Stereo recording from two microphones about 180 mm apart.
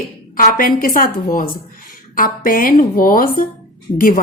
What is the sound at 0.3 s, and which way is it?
Speech, 50° left (ahead or behind).